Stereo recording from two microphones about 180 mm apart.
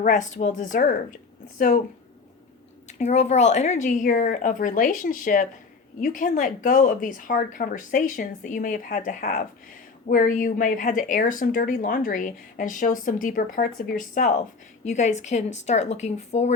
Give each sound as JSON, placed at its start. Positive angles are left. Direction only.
{"t": 0.0, "sound": "speech", "side_deg": 45}
{"t": 2.8, "sound": "speech", "side_deg": 40}